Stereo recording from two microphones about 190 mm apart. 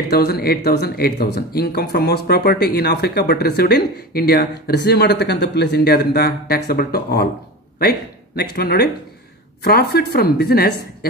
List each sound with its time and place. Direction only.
0.1 s speech: 55° left (ahead or behind)
8.4 s speech: 55° left (ahead or behind)